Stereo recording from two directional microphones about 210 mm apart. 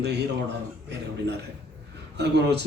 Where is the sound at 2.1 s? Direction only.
55° right (ahead or behind).